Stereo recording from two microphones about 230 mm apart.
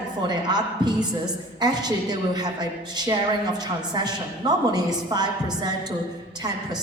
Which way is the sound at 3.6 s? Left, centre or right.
Centre.